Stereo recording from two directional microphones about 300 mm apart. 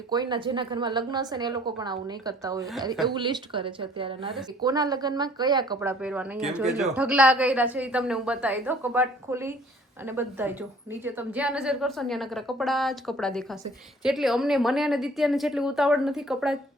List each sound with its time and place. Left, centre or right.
0.1 s a woman's voice: centre